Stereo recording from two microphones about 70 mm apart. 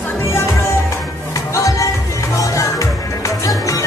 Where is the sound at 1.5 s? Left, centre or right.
Left.